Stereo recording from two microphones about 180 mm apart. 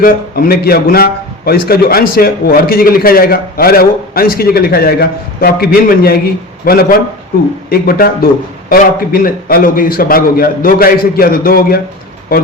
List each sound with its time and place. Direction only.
0.0 s a man's voice: 55° left (ahead or behind)